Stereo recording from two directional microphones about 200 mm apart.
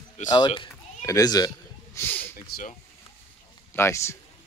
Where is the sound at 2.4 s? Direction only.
50° left (ahead or behind).